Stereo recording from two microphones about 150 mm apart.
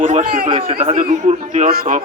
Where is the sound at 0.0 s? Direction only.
55° right (ahead or behind).